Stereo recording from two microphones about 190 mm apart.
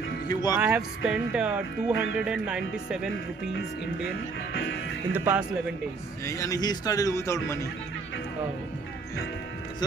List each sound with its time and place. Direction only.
0.3 s speech: 20° left (ahead or behind)
0.6 s speech: 5° right (ahead or behind)
5.1 s speech: 10° right (ahead or behind)
6.2 s a man's voice: 15° left (ahead or behind)